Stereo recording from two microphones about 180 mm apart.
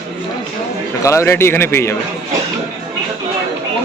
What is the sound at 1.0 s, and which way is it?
Speech, 15° left (ahead or behind).